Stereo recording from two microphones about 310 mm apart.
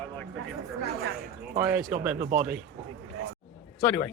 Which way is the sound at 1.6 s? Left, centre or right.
Centre.